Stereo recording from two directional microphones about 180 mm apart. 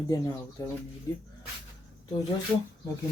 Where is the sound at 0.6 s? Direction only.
15° left (ahead or behind).